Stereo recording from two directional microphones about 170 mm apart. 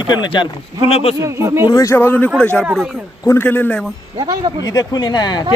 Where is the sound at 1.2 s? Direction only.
15° right (ahead or behind).